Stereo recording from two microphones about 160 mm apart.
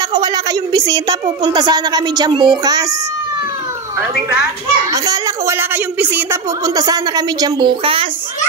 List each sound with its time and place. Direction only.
0.1 s a sound: 25° right (ahead or behind)
1.4 s a woman's voice: 30° right (ahead or behind)
4.9 s a woman's voice: 20° right (ahead or behind)